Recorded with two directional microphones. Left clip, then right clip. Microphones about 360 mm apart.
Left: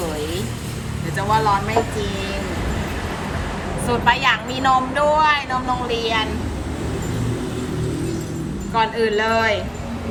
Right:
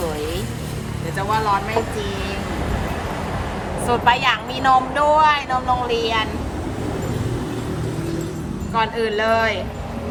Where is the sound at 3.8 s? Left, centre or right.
Centre.